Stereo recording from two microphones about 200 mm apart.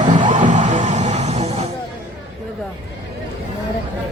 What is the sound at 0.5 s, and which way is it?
Music, 40° right (ahead or behind).